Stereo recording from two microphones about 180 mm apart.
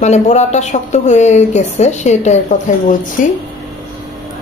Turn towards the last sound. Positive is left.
turn(degrees=45)  # may be behind; listen again after turning